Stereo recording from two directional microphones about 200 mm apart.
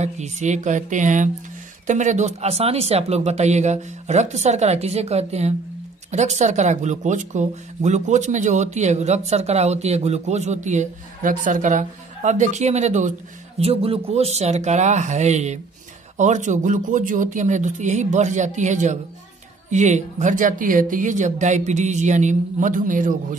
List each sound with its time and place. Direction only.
0.0 s speech: 35° right (ahead or behind)